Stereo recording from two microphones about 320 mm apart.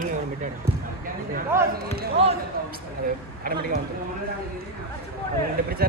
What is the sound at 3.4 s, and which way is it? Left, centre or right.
Speech, right.